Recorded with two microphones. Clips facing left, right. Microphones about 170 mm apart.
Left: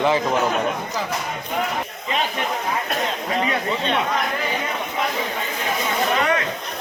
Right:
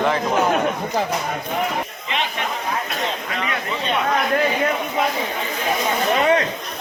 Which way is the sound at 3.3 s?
30° left (ahead or behind).